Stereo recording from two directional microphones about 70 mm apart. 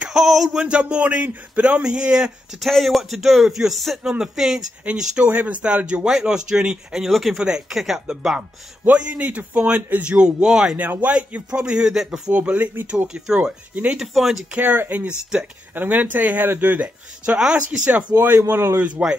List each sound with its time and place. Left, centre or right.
0.0 s speech: centre
2.6 s speech: centre
7.1 s speech: centre
7.3 s speech: centre
8.4 s a man's voice: centre
10.1 s speech: centre
10.8 s speech: right
12.4 s a man's voice: right
12.9 s speech: centre
13.9 s speech: centre
14.5 s a man's voice: right
18.2 s a man's voice: right
18.8 s speech: centre